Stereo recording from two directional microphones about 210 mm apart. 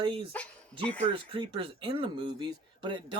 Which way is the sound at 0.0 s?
25° right (ahead or behind).